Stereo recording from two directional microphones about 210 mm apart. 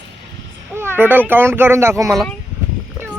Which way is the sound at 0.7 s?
10° right (ahead or behind).